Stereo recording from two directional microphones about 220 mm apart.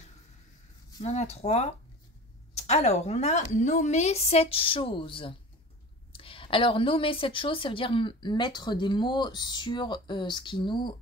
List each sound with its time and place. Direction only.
1.0 s a woman's voice: 30° left (ahead or behind)